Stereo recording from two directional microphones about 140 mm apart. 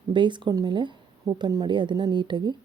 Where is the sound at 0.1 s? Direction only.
35° right (ahead or behind).